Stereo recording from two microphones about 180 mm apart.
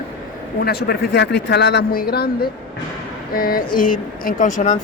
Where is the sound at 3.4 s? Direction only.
55° left (ahead or behind).